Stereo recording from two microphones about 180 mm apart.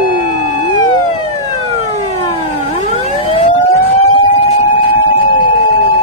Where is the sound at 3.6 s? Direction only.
20° left (ahead or behind).